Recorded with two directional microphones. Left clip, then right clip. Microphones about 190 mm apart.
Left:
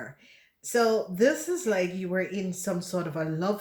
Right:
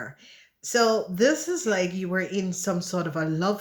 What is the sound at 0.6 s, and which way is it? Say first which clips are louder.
Speech: right 2 dB; 35° right (ahead or behind).